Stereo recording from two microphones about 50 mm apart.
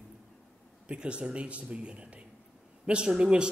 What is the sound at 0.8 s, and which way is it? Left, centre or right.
A man's voice, right.